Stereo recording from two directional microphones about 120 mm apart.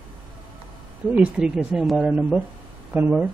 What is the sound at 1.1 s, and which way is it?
Speech, 5° right (ahead or behind).